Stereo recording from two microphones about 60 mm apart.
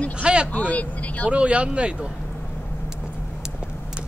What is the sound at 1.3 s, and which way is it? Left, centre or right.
Speech, right.